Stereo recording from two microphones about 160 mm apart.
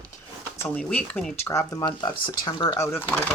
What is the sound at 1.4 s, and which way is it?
Speech, 20° left (ahead or behind).